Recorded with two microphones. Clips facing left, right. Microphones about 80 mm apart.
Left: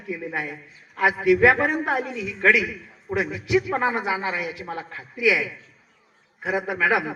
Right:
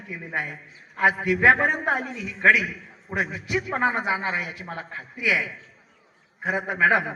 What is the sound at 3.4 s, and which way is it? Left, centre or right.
Speech, right.